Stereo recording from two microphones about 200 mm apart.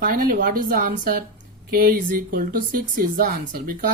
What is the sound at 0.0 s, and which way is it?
Speech, 45° right (ahead or behind).